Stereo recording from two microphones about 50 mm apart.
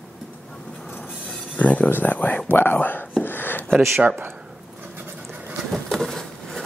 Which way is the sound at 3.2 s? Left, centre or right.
Left.